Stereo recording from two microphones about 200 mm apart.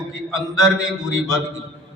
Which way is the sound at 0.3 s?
15° left (ahead or behind).